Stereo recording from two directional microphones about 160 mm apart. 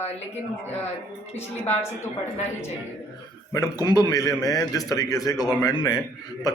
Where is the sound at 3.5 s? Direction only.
20° left (ahead or behind).